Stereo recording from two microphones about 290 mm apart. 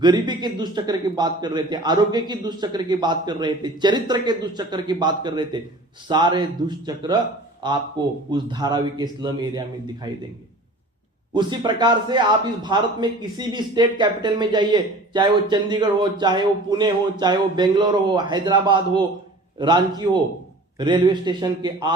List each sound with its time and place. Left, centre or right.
0.0 s a man's voice: centre
11.3 s a man's voice: centre